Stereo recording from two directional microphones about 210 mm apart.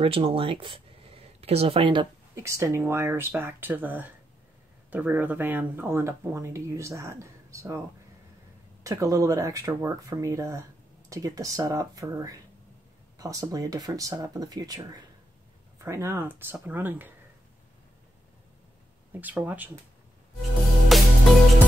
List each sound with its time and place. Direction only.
0.0 s speech: 25° right (ahead or behind)
8.8 s speech: 15° right (ahead or behind)
19.1 s speech: 10° right (ahead or behind)
20.9 s music: centre (ahead or behind)